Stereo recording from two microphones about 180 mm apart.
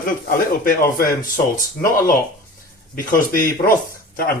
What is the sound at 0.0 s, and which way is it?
Speech, 50° left (ahead or behind).